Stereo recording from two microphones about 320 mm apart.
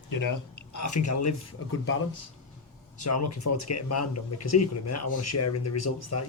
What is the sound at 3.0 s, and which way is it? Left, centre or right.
Speech, left.